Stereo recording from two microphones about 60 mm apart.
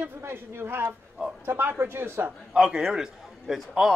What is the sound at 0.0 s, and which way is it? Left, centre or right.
Speech, right.